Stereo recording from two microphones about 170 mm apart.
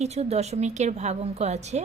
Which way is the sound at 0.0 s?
40° right (ahead or behind).